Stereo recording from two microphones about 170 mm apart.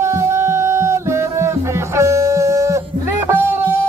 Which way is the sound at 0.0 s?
15° right (ahead or behind).